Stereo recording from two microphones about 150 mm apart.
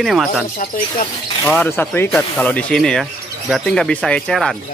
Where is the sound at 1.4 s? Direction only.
5° left (ahead or behind).